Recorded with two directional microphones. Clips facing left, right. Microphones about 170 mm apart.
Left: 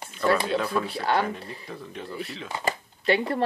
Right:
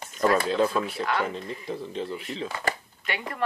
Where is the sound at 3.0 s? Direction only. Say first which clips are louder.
Left 10 dB; 35° left (ahead or behind).